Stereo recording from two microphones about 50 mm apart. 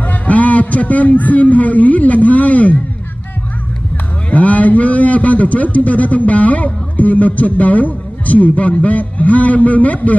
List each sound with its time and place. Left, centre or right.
0.0 s a man's voice: left
4.3 s a man's voice: left